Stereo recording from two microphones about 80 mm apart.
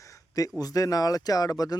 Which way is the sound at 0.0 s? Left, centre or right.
Left.